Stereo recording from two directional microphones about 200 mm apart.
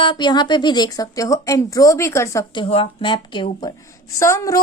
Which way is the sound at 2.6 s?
30° left (ahead or behind).